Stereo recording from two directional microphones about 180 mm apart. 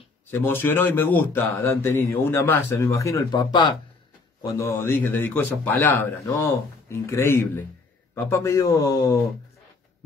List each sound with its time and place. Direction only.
0.3 s speech: 10° left (ahead or behind)